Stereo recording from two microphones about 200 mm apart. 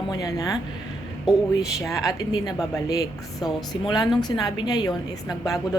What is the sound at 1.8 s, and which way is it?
A woman's voice, 15° left (ahead or behind).